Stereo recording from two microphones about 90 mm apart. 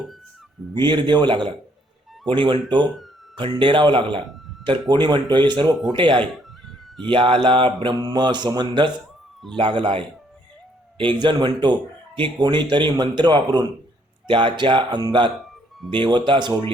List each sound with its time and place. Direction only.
0.7 s speech: 55° right (ahead or behind)
5.9 s mantra: 70° right (ahead or behind)
6.3 s cat: centre (ahead or behind)
7.1 s mantra: 70° right (ahead or behind)
7.9 s mantra: 55° right (ahead or behind); by 10.1 s 70° right (ahead or behind)
10.9 s speech: 70° right (ahead or behind)
14.3 s speech: 65° right (ahead or behind)